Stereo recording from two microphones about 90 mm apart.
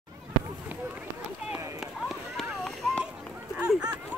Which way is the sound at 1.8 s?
Centre (ahead or behind).